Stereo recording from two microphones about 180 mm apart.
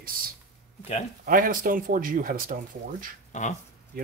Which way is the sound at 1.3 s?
50° right (ahead or behind).